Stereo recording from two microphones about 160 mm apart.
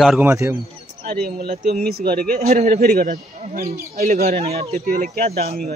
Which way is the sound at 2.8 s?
75° right (ahead or behind).